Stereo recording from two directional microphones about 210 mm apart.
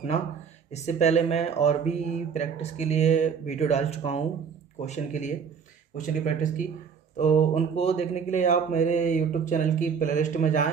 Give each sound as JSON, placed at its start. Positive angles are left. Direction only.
{"t": 0.7, "sound": "speech", "side_deg": 30}